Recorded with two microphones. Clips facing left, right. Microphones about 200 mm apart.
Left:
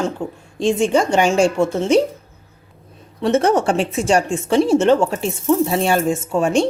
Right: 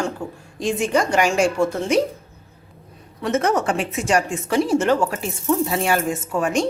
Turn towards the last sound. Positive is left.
turn(degrees=25)  # may be behind; listen again after turning